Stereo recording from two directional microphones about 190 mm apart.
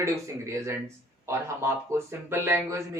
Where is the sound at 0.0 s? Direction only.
15° right (ahead or behind).